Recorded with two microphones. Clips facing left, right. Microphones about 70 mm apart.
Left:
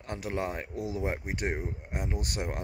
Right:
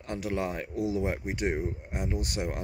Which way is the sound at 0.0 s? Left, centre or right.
Left.